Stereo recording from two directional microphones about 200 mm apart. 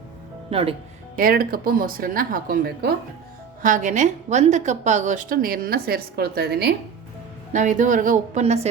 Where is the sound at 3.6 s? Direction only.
40° right (ahead or behind).